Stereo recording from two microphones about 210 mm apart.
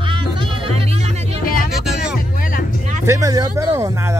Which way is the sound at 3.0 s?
15° right (ahead or behind).